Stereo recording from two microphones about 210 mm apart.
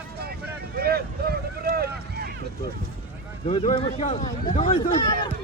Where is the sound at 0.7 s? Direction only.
50° right (ahead or behind).